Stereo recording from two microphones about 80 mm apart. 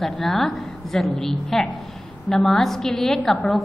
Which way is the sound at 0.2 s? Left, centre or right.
Centre.